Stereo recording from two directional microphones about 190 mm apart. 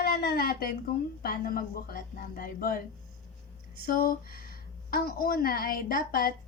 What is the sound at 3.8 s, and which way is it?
A woman's voice, 50° left (ahead or behind).